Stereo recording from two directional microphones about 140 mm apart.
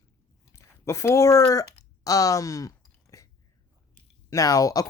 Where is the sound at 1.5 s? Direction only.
25° left (ahead or behind).